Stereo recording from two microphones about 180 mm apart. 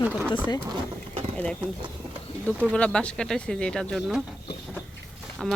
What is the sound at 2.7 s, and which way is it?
Speech, 5° left (ahead or behind).